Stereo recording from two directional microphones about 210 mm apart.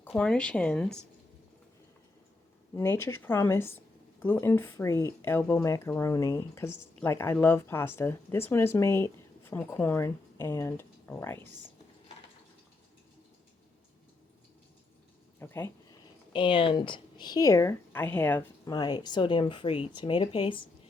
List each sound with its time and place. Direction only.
0.0 s speech: 5° left (ahead or behind)
2.7 s speech: 10° left (ahead or behind)
15.4 s speech: 10° left (ahead or behind)
16.3 s speech: 25° left (ahead or behind)